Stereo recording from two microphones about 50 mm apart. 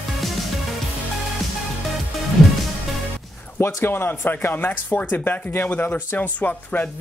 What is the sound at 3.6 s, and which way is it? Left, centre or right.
Speech, left.